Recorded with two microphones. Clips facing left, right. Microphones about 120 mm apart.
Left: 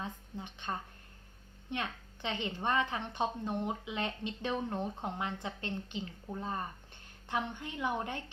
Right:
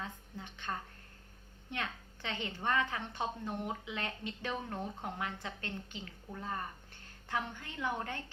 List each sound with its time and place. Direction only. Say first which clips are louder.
0.0 s a woman's voice: left 3 dB; 20° left (ahead or behind)